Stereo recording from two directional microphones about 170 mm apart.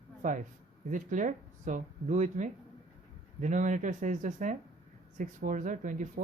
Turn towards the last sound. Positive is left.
turn(degrees=-50)  # may be behind; listen again after turning